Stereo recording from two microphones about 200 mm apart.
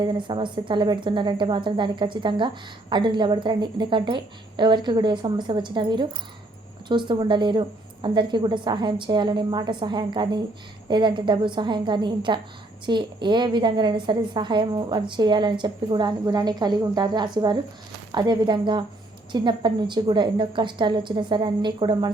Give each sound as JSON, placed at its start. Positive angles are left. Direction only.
{"t": 0.0, "sound": "a woman's voice", "side_deg": -25}